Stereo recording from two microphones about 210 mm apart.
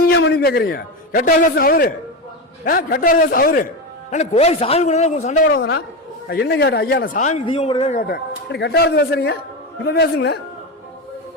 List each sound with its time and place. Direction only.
0.0 s a man's voice: 55° left (ahead or behind)
4.1 s a man's voice: 30° left (ahead or behind)
6.2 s speech: 50° left (ahead or behind); by 7.4 s 35° left (ahead or behind)
7.4 s a man's voice: 25° left (ahead or behind)
8.0 s speech: 50° left (ahead or behind)